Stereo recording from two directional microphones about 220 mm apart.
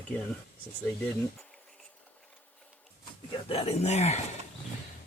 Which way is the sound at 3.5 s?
25° left (ahead or behind).